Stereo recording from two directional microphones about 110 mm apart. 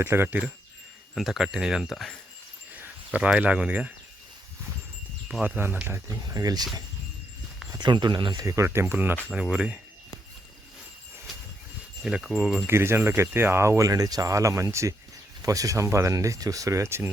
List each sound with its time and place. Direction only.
0.0 s speech: 20° right (ahead or behind)
1.1 s speech: centre (ahead or behind)
2.7 s speech: 15° right (ahead or behind)
5.4 s speech: 15° right (ahead or behind)
6.1 s speech: 35° right (ahead or behind)
7.8 s speech: 45° right (ahead or behind)
8.4 s speech: 25° right (ahead or behind); by 9.8 s 10° right (ahead or behind)
12.0 s speech: 5° right (ahead or behind)
12.6 s speech: 20° right (ahead or behind)